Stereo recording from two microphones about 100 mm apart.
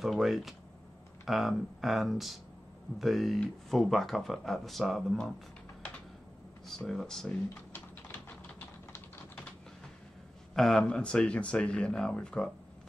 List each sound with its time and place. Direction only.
0.0 s speech: centre (ahead or behind)
6.7 s speech: 5° left (ahead or behind)
8.5 s typing: 20° left (ahead or behind)
10.5 s speech: 5° left (ahead or behind)